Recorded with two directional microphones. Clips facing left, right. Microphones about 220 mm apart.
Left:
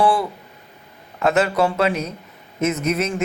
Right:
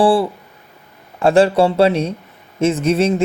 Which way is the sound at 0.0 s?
30° right (ahead or behind).